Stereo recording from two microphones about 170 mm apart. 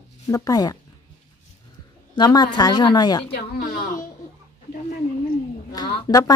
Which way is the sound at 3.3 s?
80° left.